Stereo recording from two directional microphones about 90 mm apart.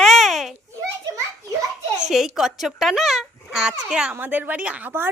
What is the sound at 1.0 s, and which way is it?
Children playing, 35° right (ahead or behind).